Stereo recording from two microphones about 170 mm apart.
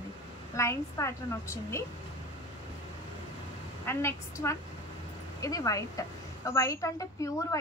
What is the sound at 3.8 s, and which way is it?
A woman's voice, 15° left (ahead or behind).